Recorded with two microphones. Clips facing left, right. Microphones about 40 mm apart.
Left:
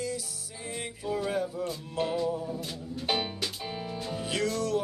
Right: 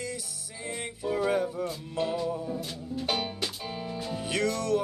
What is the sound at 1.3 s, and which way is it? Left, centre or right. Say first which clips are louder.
Music: right 3 dB; right.